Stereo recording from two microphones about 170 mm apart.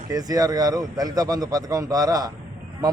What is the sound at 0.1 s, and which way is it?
A man's voice, 20° right (ahead or behind).